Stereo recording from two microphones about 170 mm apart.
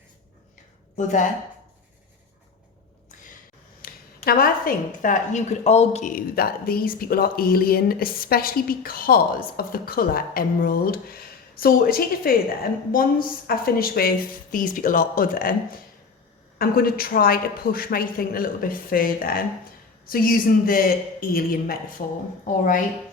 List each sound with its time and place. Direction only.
0.9 s speech: 45° left (ahead or behind)
3.8 s a woman's voice: 60° left (ahead or behind)
22.0 s speech: 50° left (ahead or behind)